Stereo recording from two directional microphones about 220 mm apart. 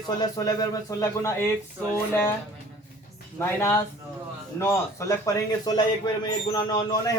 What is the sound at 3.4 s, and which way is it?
Speech, 10° left (ahead or behind).